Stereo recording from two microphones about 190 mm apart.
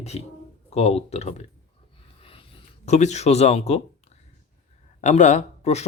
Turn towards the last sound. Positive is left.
turn(degrees=35)  # may be behind; listen again after turning